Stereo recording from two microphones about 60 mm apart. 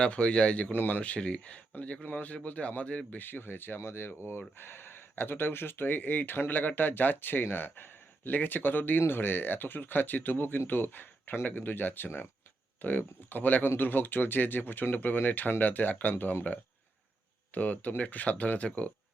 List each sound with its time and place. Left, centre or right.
0.0 s speech: centre
0.7 s speech: left
1.0 s speech: centre
3.1 s speech: left
17.5 s speech: left